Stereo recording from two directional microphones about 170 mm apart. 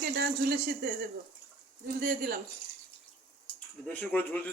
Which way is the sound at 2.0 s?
60° right (ahead or behind).